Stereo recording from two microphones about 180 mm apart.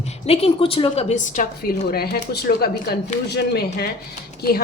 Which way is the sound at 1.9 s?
60° left (ahead or behind).